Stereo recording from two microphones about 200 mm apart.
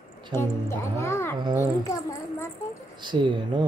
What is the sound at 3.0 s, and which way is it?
Speech, 25° right (ahead or behind).